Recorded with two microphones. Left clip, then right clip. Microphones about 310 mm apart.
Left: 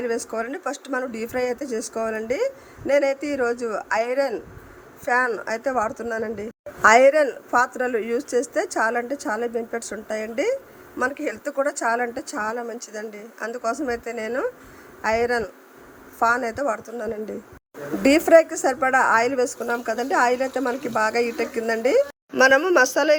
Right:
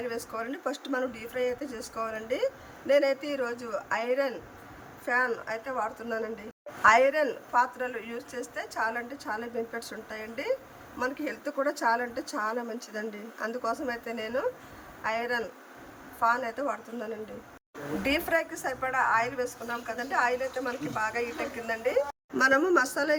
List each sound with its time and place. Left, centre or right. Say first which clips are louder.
0.0 s a woman's voice: left 8 dB; centre